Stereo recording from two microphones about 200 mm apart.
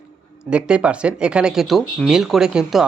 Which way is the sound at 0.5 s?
5° right (ahead or behind).